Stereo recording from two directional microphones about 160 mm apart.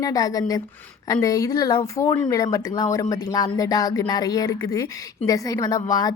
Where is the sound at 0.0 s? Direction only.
25° left (ahead or behind).